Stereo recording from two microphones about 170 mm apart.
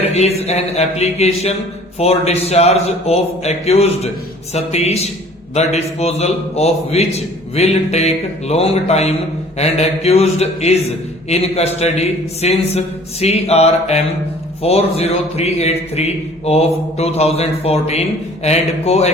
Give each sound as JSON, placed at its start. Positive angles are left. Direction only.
{"t": 0.1, "sound": "a man's voice", "side_deg": 40}